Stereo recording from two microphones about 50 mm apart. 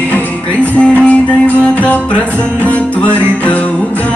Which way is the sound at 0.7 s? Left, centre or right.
Left.